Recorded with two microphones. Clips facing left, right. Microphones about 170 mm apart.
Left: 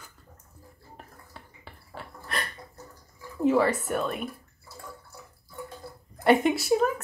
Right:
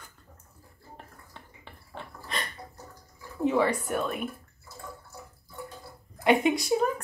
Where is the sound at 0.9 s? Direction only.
5° left (ahead or behind).